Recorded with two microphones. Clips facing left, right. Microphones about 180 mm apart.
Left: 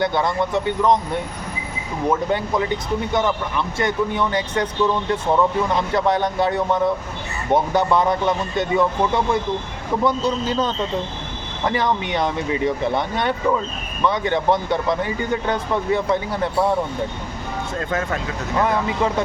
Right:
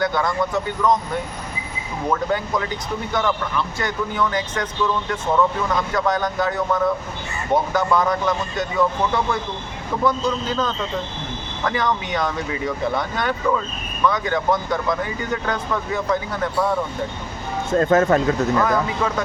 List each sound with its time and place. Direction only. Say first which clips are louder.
0.0 s speech: left 1 dB; 25° left (ahead or behind)
2.0 s speech: left 2 dB; 20° left (ahead or behind)
17.7 s speech: right 10 dB; 45° right (ahead or behind)
18.6 s speech: even; 25° left (ahead or behind)